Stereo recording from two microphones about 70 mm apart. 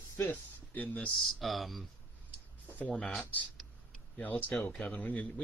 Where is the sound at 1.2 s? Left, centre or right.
Centre.